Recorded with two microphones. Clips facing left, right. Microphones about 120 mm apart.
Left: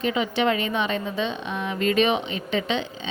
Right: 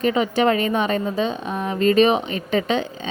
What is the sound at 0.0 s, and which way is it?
A woman's voice, 45° right (ahead or behind).